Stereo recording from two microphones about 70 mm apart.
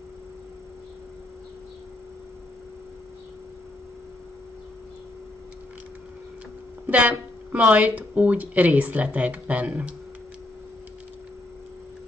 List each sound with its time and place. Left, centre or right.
6.9 s speech: right